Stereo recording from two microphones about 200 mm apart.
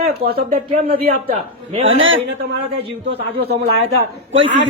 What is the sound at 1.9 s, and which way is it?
Speech, 75° right (ahead or behind).